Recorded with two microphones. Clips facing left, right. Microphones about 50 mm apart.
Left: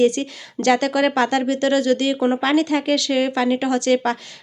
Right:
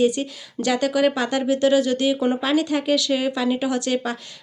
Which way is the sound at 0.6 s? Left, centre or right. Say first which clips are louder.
Left 2 dB; left.